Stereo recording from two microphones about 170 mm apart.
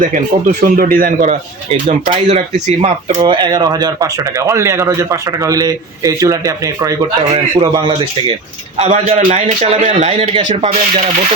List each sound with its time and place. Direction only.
0.0 s speech: 50° right (ahead or behind)
1.3 s speech: 40° right (ahead or behind)
3.2 s speech: 30° right (ahead or behind)
8.8 s a man's voice: 40° right (ahead or behind)